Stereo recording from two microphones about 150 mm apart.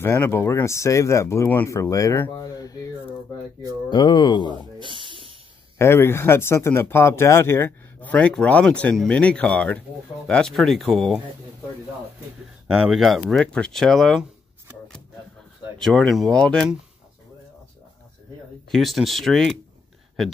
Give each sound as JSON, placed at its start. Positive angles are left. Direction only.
{"t": 0.0, "sound": "speech", "side_deg": 15}
{"t": 3.9, "sound": "speech", "side_deg": 30}
{"t": 4.7, "sound": "snake", "side_deg": -35}
{"t": 5.8, "sound": "speech", "side_deg": 15}
{"t": 12.6, "sound": "speech", "side_deg": 0}
{"t": 15.8, "sound": "speech", "side_deg": 5}
{"t": 18.7, "sound": "speech", "side_deg": 0}